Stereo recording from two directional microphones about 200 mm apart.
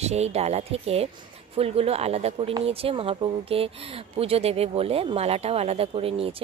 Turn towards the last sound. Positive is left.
turn(degrees=-30)  # may be behind; listen again after turning